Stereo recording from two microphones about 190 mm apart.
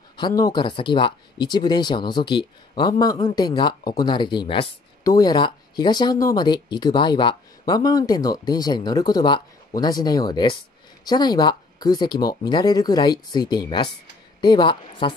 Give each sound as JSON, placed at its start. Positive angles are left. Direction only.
{"t": 0.2, "sound": "a woman's voice", "side_deg": 20}